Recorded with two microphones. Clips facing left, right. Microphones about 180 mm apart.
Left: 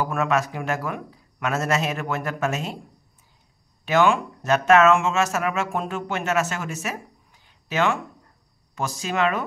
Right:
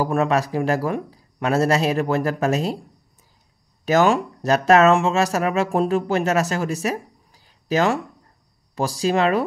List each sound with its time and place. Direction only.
0.0 s speech: 35° right (ahead or behind)
3.8 s speech: 40° right (ahead or behind)